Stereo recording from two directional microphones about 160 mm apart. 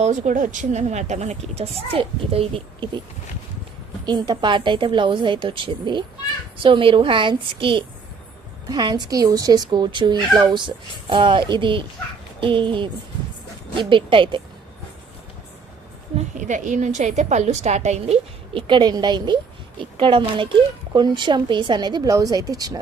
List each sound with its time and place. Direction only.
0.0 s a woman's voice: 50° right (ahead or behind)
4.0 s a woman's voice: 25° right (ahead or behind)
16.1 s a woman's voice: 50° right (ahead or behind); by 22.8 s 25° right (ahead or behind)